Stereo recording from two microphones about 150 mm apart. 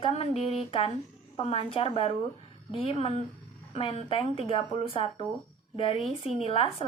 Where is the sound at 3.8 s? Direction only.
40° left (ahead or behind).